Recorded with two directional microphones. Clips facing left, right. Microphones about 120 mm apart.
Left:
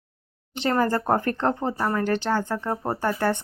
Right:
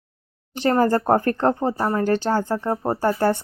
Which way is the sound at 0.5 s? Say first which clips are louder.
Right 4 dB; 40° right (ahead or behind).